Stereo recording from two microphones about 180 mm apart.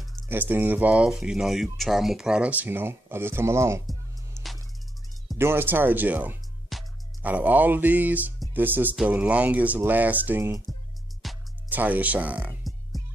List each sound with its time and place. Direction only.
0.3 s speech: 10° right (ahead or behind)
4.4 s music: 15° right (ahead or behind)
5.4 s speech: 10° right (ahead or behind)
6.7 s music: centre (ahead or behind)
7.2 s speech: 10° right (ahead or behind)
11.2 s music: 10° right (ahead or behind)